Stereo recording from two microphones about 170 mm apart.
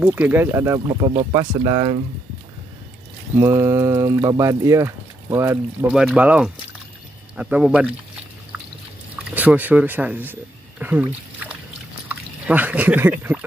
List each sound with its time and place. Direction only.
0.0 s speech: 10° right (ahead or behind)
0.7 s speech: 25° right (ahead or behind)
3.3 s speech: 15° right (ahead or behind)
9.3 s speech: 10° right (ahead or behind)
12.1 s speech: 10° right (ahead or behind)